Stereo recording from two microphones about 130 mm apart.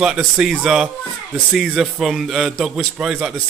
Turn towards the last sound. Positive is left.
turn(degrees=-5)  # may be behind; listen again after turning